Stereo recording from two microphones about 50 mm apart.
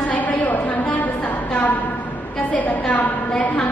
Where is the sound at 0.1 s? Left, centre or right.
Left.